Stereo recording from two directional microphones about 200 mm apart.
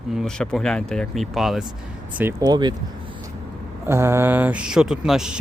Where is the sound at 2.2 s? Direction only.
15° right (ahead or behind).